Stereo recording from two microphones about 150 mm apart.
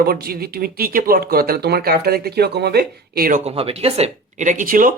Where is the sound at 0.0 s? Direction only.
90° right.